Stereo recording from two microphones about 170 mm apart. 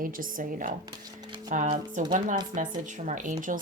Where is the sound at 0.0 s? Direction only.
55° right (ahead or behind).